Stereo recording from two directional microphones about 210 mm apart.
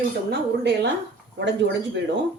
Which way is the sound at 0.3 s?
55° right (ahead or behind).